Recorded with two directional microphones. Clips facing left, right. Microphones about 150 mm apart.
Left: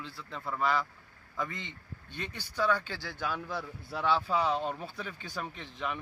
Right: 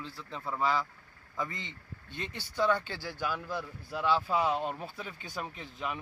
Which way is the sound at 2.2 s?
15° right (ahead or behind).